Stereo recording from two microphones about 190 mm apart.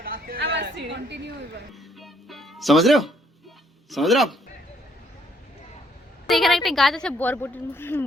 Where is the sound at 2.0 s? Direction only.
Centre (ahead or behind).